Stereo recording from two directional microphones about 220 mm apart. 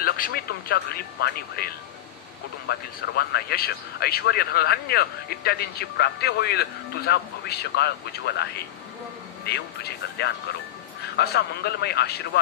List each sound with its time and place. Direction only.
0.0 s a man's voice: 45° left (ahead or behind)
11.1 s a man's voice: 50° left (ahead or behind)